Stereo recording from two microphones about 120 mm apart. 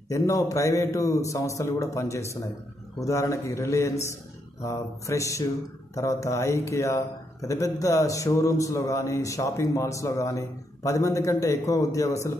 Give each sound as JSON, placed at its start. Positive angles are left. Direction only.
{"t": 0.1, "sound": "speech", "side_deg": 30}